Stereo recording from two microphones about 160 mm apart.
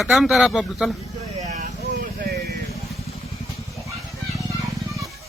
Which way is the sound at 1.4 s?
55° right (ahead or behind).